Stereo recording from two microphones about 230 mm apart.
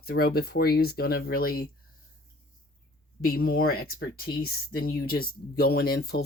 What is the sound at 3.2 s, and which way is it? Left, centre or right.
Speech, left.